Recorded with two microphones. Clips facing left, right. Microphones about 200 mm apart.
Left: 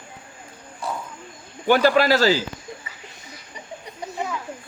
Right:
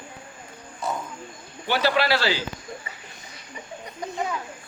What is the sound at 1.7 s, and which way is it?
Speech, 45° left (ahead or behind).